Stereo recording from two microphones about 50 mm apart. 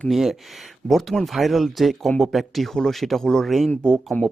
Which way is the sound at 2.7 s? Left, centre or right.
Centre.